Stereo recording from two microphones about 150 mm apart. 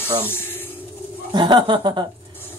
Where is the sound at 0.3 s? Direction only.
15° left (ahead or behind).